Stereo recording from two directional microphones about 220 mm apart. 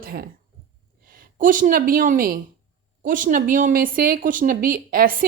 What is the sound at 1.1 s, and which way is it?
A woman's voice, 40° right (ahead or behind).